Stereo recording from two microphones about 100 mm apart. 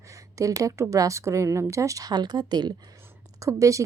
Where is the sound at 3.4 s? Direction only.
30° right (ahead or behind).